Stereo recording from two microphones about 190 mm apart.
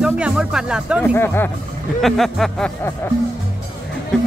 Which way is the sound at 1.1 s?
10° left (ahead or behind).